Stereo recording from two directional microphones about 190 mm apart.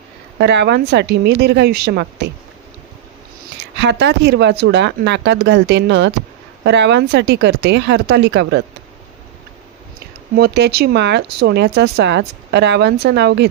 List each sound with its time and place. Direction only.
0.4 s speech: 65° right (ahead or behind)
3.7 s speech: 65° right (ahead or behind)
10.3 s speech: 60° right (ahead or behind)